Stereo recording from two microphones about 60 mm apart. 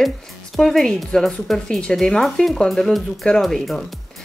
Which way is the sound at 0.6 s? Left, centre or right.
Centre.